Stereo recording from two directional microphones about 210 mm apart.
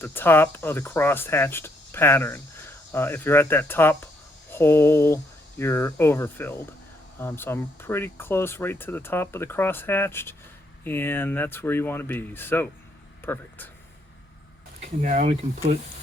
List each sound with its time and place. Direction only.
0.0 s speech: 10° left (ahead or behind)
15.0 s speech: 35° right (ahead or behind)